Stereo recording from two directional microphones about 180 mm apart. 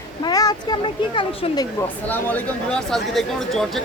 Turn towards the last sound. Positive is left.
turn(degrees=0)  # may be behind; listen again after turning